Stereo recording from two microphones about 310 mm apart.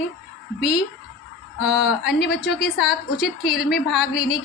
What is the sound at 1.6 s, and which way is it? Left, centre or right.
A woman's voice, centre.